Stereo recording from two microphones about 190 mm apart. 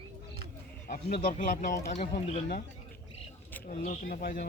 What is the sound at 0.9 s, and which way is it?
Speech, 50° left (ahead or behind).